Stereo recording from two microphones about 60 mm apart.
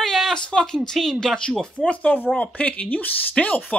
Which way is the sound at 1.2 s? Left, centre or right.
Centre.